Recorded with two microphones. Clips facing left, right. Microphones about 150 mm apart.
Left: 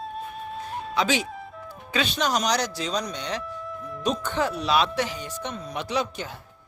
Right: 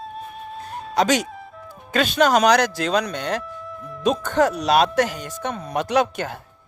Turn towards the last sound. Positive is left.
turn(degrees=-55)  # may be behind; listen again after turning